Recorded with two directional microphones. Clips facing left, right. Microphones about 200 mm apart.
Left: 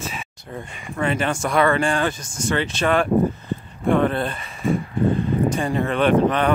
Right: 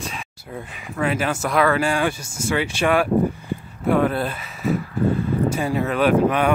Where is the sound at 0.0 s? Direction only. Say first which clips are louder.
Left 1 dB; centre (ahead or behind).